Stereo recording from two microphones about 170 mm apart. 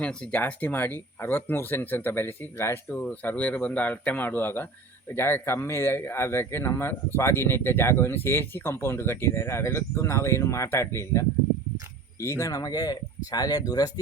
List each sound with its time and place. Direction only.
0.0 s speech: 5° left (ahead or behind); by 14.0 s 20° left (ahead or behind)